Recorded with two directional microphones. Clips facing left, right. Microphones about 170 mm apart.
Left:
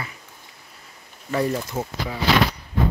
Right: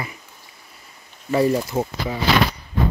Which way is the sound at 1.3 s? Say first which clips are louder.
Right 5 dB; 10° right (ahead or behind).